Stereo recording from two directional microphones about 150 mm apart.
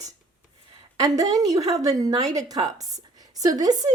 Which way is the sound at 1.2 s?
25° right (ahead or behind).